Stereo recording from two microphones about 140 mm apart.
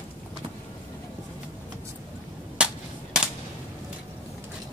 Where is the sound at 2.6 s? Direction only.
5° right (ahead or behind).